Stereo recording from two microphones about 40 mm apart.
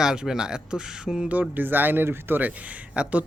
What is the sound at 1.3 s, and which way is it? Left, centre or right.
Speech, right.